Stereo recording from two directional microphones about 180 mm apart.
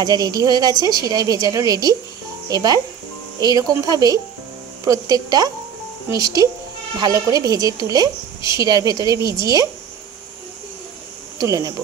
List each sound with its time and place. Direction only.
0.0 s a woman's voice: 20° right (ahead or behind)
11.3 s a woman's voice: 20° right (ahead or behind)